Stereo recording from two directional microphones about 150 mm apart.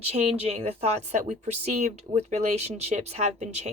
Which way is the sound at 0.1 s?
45° right (ahead or behind).